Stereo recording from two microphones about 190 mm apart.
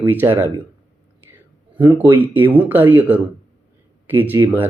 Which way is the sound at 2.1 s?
10° right (ahead or behind).